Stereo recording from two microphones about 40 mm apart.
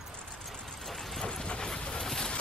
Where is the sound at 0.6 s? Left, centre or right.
Centre.